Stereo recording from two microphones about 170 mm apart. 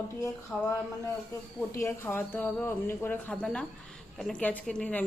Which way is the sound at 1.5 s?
15° left (ahead or behind).